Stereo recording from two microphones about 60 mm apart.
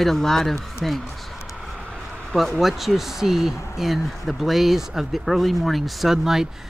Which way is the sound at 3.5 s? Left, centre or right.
Left.